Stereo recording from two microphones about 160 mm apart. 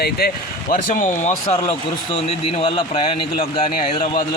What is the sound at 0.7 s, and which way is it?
Speech, 55° left (ahead or behind).